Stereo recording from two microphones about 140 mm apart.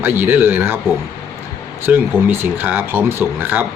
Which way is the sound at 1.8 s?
15° right (ahead or behind).